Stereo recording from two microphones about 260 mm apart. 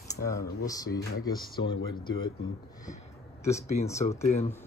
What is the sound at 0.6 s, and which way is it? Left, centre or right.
Speech, centre.